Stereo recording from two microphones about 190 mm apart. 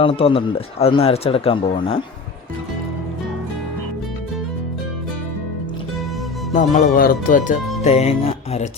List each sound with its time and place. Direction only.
0.0 s speech: 30° left (ahead or behind)
6.5 s speech: 40° left (ahead or behind)
7.9 s speech: 35° left (ahead or behind)